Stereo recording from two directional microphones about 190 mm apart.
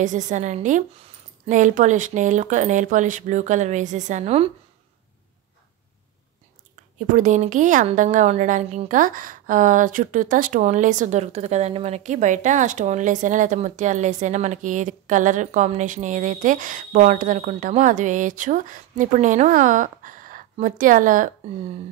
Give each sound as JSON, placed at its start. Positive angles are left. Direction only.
{"t": 0.0, "sound": "a woman's voice", "side_deg": -40}
{"t": 7.0, "sound": "a woman's voice", "side_deg": -40}